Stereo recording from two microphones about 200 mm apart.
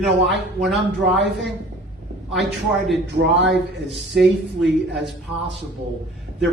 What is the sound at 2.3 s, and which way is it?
Speech, centre (ahead or behind).